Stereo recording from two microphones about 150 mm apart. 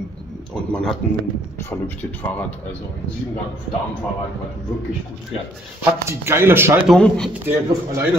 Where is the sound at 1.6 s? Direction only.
15° left (ahead or behind).